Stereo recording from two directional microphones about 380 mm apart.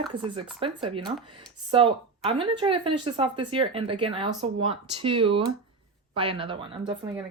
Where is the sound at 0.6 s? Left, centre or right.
Centre.